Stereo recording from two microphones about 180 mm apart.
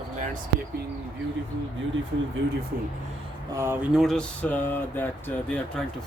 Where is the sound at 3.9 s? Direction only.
Centre (ahead or behind).